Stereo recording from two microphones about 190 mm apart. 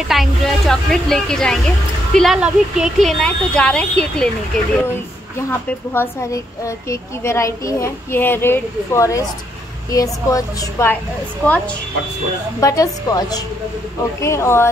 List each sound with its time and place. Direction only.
0.1 s speech: centre (ahead or behind)
5.5 s a woman's voice: 15° left (ahead or behind)